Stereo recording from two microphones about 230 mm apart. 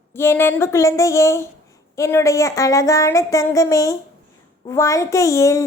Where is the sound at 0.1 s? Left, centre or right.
Centre.